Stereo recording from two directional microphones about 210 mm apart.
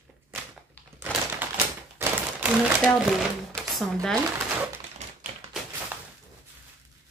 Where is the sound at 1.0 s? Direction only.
10° right (ahead or behind).